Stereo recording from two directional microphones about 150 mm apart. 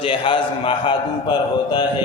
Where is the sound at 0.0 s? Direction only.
35° left (ahead or behind).